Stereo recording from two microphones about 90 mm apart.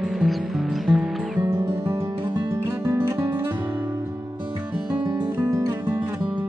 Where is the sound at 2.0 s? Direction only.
30° right (ahead or behind).